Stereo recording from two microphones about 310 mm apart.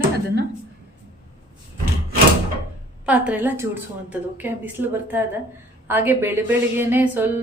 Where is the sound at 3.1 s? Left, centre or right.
Centre.